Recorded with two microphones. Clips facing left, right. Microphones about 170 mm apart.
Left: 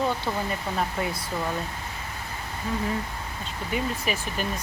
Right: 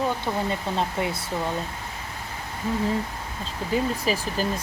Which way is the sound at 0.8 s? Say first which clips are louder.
Right 2 dB; 25° right (ahead or behind).